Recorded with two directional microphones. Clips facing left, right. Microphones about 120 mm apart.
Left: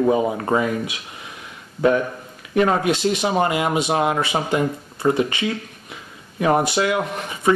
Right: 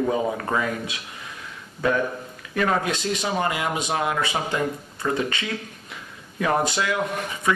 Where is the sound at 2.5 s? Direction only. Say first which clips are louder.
Left 5 dB; 20° left (ahead or behind).